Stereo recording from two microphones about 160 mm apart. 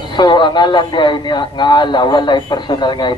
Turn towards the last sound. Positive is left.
turn(degrees=30)  # may be behind; listen again after turning